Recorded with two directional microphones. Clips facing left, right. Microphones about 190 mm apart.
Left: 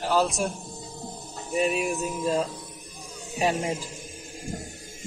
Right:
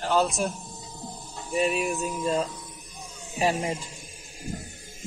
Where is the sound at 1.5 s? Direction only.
Centre (ahead or behind).